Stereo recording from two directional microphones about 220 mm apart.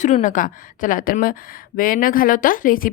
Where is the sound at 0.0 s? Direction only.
35° left (ahead or behind).